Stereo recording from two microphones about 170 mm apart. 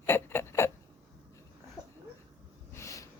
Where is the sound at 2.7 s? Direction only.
20° left (ahead or behind).